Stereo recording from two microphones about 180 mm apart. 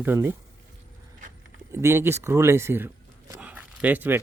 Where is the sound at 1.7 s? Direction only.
15° right (ahead or behind).